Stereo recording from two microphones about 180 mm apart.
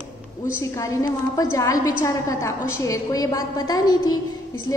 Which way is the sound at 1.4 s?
20° left (ahead or behind).